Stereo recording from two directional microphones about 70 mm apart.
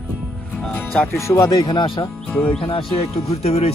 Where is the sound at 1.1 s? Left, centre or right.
Left.